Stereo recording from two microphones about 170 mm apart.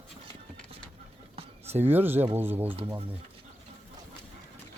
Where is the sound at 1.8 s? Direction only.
10° right (ahead or behind).